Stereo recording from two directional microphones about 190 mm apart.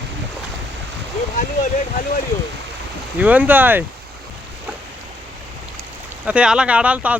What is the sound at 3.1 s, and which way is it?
Speech, 10° right (ahead or behind).